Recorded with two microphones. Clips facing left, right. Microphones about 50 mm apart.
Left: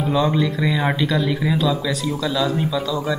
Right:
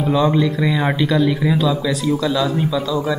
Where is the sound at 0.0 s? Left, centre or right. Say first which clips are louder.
Right 3 dB; centre.